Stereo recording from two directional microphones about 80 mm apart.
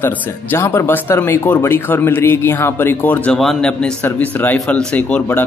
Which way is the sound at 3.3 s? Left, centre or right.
Centre.